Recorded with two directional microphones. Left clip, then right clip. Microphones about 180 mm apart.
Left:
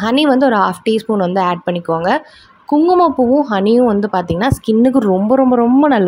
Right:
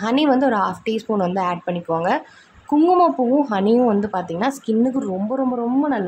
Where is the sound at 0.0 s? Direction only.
30° left (ahead or behind).